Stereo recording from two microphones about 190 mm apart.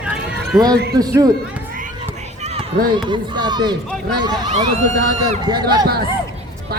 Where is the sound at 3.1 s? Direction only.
20° right (ahead or behind).